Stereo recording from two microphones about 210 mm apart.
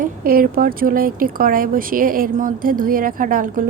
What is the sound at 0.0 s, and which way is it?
Speech, 45° right (ahead or behind).